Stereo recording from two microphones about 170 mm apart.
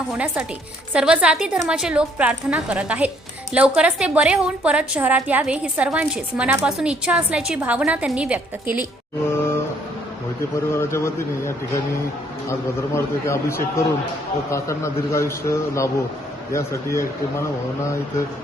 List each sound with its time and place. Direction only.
0.1 s a woman's voice: 5° right (ahead or behind)
9.3 s a sound: 15° left (ahead or behind)
10.8 s a man's voice: 15° left (ahead or behind)
13.2 s a man's voice: 15° left (ahead or behind)